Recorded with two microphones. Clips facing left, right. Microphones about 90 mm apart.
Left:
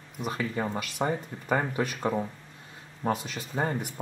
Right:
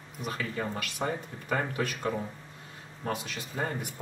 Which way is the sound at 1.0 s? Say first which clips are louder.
Left 4 dB; 35° left (ahead or behind).